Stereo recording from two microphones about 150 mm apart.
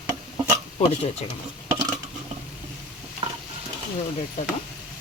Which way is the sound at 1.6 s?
25° right (ahead or behind).